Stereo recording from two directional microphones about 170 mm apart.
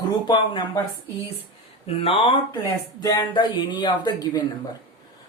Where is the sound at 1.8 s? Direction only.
35° left (ahead or behind).